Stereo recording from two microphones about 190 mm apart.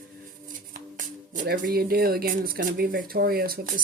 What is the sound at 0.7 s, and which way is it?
A woman's voice, 50° right (ahead or behind).